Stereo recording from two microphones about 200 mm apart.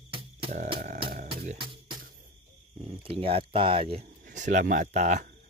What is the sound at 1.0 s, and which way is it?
Music, 40° right (ahead or behind).